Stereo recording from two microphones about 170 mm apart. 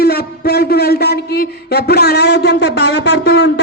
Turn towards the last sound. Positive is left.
turn(degrees=85)